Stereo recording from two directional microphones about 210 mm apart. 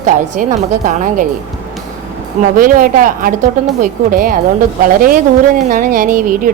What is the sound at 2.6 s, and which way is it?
A woman's voice, 40° right (ahead or behind).